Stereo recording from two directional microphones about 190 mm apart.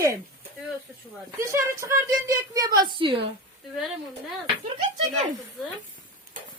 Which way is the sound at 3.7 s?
Centre (ahead or behind).